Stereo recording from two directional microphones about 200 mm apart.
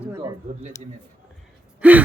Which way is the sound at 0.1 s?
15° right (ahead or behind).